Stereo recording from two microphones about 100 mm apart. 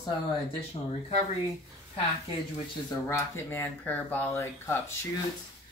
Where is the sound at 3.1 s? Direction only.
20° left (ahead or behind).